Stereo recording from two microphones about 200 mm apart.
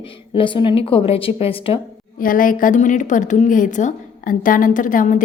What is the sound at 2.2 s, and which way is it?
A woman's voice, 45° left (ahead or behind).